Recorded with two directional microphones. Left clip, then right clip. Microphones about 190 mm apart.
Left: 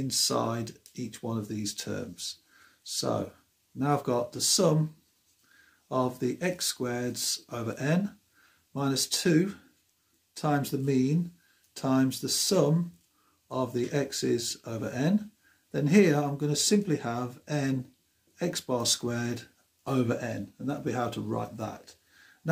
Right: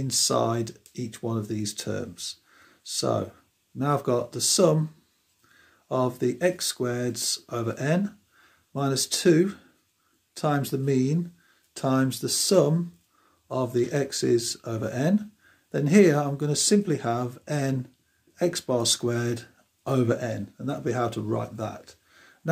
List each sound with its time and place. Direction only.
0.1 s speech: 45° right (ahead or behind)
5.9 s speech: 35° right (ahead or behind)